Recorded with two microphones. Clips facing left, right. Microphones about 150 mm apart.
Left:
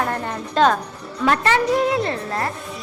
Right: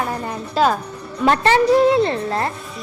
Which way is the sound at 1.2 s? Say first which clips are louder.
Right 3 dB; 30° right (ahead or behind).